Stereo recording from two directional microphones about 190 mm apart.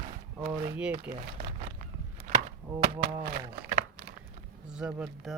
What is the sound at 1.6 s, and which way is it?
Walk, 40° right (ahead or behind).